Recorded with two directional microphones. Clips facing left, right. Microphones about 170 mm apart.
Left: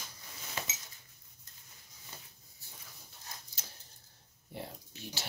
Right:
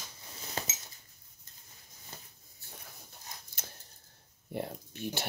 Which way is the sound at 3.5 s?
55° right (ahead or behind).